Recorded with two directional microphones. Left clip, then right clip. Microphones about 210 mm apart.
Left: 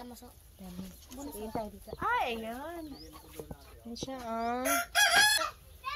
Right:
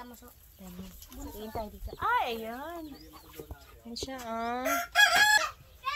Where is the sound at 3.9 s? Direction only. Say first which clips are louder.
Right 1 dB; 15° right (ahead or behind).